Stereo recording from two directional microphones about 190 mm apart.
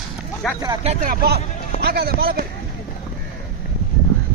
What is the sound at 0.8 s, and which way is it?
Speech, 45° right (ahead or behind).